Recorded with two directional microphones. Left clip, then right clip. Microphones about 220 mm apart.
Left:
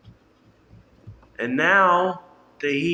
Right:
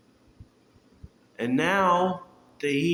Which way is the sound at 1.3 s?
35° right (ahead or behind).